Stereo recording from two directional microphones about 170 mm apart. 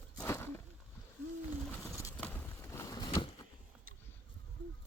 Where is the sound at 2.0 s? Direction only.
15° left (ahead or behind).